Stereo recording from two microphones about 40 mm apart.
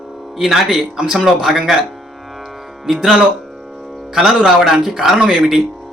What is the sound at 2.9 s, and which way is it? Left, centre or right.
Speech, centre.